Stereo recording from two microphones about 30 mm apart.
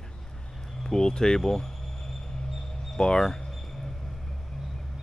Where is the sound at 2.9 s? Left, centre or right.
Left.